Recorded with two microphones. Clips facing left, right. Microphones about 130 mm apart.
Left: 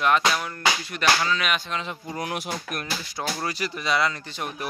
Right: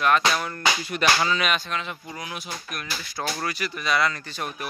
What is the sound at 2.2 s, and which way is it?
Speech, 60° left (ahead or behind).